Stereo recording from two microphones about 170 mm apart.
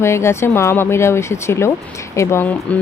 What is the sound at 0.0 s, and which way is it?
Speech, 15° left (ahead or behind).